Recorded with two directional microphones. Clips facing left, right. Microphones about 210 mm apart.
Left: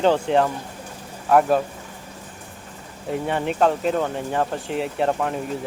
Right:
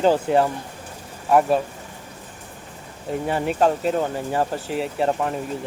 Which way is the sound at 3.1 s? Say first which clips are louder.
Even; 5° right (ahead or behind).